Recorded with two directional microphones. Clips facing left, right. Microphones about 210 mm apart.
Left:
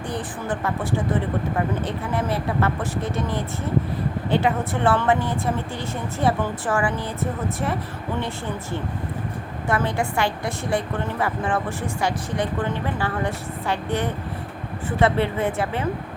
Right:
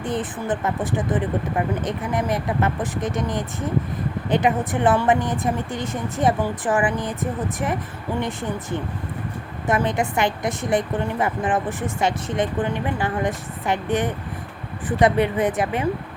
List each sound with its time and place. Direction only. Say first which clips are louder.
0.0 s speech: right 3 dB; 20° right (ahead or behind)
9.6 s a woman's voice: right 2 dB; 20° right (ahead or behind)